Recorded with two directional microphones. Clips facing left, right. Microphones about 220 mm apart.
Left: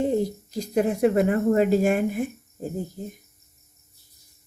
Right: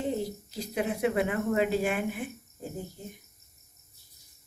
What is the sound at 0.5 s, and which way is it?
A woman's voice, 45° left (ahead or behind).